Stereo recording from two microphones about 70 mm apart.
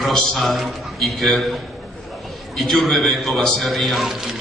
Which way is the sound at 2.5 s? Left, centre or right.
Centre.